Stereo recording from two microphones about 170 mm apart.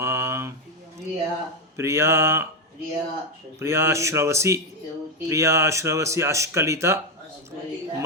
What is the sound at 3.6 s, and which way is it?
Speech, 15° right (ahead or behind).